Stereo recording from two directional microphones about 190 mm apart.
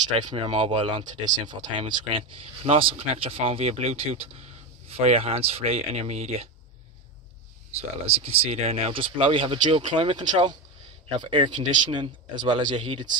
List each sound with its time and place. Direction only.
0.2 s speech: 25° right (ahead or behind)
8.0 s speech: 30° right (ahead or behind)